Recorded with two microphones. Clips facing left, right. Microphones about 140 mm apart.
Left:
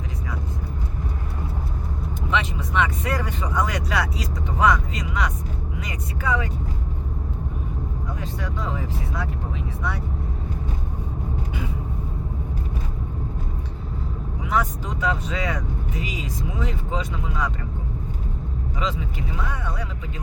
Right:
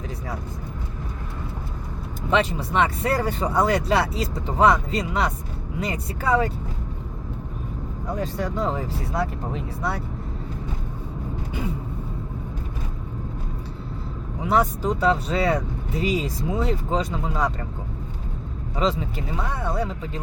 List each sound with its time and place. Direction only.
2.3 s speech: 35° right (ahead or behind)
8.1 s speech: 40° right (ahead or behind)
14.4 s speech: 35° right (ahead or behind)
18.8 s speech: 35° right (ahead or behind)